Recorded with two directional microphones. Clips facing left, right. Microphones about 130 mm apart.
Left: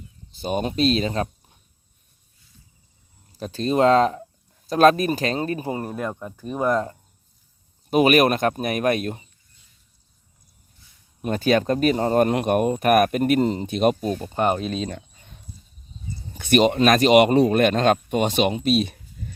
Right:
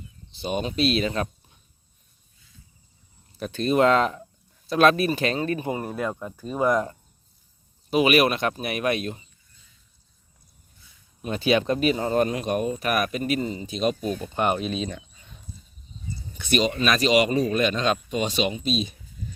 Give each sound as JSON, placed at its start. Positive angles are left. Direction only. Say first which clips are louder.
{"t": 0.3, "sound": "speech", "louder": "left 3 dB", "side_deg": 45}
{"t": 3.3, "sound": "speech", "louder": "even", "side_deg": 35}
{"t": 5.9, "sound": "speech", "louder": "even", "side_deg": 0}
{"t": 6.6, "sound": "speech", "louder": "even", "side_deg": -10}
{"t": 7.9, "sound": "speech", "louder": "left 3 dB", "side_deg": 45}
{"t": 11.2, "sound": "speech", "louder": "left 2 dB", "side_deg": 50}
{"t": 14.2, "sound": "speech", "louder": "left 2 dB", "side_deg": 35}
{"t": 16.4, "sound": "speech", "louder": "left 6 dB", "side_deg": 55}